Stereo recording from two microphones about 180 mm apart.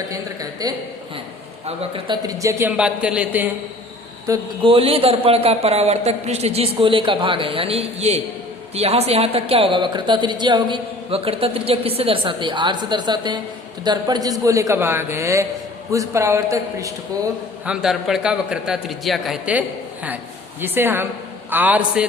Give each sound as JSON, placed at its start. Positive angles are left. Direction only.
{"t": 0.1, "sound": "a man's voice", "side_deg": -20}
{"t": 1.6, "sound": "a man's voice", "side_deg": -30}
{"t": 4.3, "sound": "a man's voice", "side_deg": -30}
{"t": 17.7, "sound": "a man's voice", "side_deg": 0}